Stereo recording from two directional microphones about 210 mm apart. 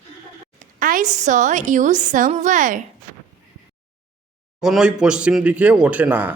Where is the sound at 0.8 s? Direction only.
40° right (ahead or behind).